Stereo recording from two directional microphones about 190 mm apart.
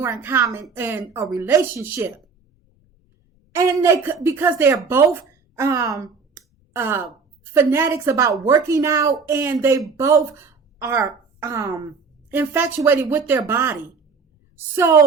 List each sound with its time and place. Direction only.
0.0 s a woman's voice: 10° right (ahead or behind)
3.5 s a woman's voice: 15° right (ahead or behind)
5.5 s sigh: 15° right (ahead or behind)
7.5 s a woman's voice: 10° right (ahead or behind)